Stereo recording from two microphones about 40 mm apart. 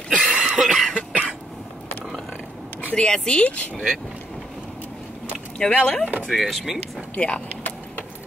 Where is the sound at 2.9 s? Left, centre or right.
Centre.